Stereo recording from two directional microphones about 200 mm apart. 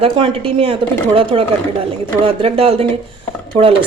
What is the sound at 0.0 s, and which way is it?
Speech, 25° right (ahead or behind).